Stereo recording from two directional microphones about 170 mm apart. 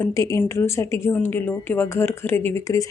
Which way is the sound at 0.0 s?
20° left (ahead or behind).